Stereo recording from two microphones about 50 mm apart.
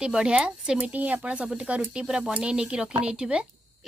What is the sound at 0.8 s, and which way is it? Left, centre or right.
Speech, right.